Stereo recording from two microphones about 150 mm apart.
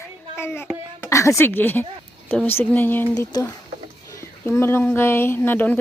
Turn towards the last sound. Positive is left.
turn(degrees=10)  # may be behind; listen again after turning